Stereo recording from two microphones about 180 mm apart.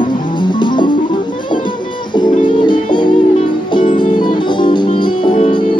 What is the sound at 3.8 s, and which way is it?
Music, 45° left (ahead or behind).